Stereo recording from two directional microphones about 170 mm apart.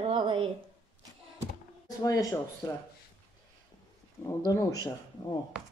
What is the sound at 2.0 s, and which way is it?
Speech, 20° left (ahead or behind).